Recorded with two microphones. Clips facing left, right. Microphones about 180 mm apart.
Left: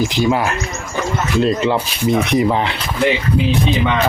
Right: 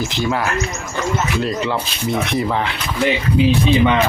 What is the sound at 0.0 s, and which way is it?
Speech, 15° left (ahead or behind).